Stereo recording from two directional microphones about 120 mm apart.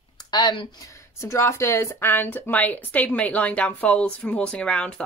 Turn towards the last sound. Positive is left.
turn(degrees=10)  # may be behind; listen again after turning